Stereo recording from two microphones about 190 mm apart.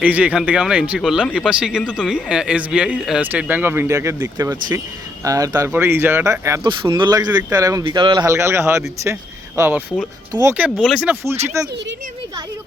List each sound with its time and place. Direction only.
0.0 s speech: 5° right (ahead or behind); by 8.2 s 25° right (ahead or behind)
8.2 s speech: 15° right (ahead or behind)